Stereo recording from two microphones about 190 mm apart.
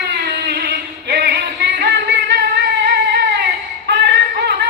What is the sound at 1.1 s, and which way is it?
Music, 60° right (ahead or behind).